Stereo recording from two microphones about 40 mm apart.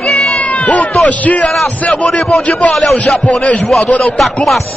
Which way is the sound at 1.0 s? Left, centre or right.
Left.